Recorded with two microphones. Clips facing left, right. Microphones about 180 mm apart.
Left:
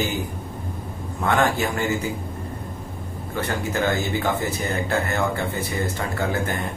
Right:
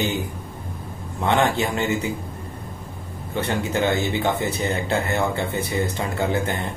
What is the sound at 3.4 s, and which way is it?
A man's voice, 20° right (ahead or behind).